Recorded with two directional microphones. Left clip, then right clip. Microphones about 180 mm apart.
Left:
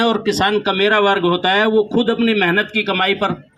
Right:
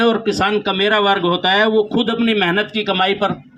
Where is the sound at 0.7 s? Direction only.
25° left (ahead or behind); by 3.3 s centre (ahead or behind).